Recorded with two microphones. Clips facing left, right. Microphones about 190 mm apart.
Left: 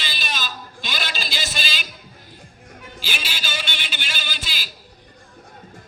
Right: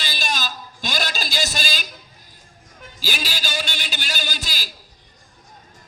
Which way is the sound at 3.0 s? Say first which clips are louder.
Right 4 dB; 40° right (ahead or behind).